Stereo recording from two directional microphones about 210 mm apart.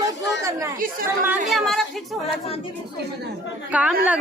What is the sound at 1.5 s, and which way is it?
Speech, centre (ahead or behind).